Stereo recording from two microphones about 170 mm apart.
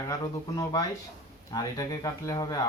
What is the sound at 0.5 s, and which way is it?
Speech, 25° left (ahead or behind).